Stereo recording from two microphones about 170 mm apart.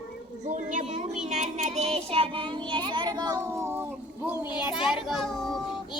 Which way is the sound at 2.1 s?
30° right (ahead or behind).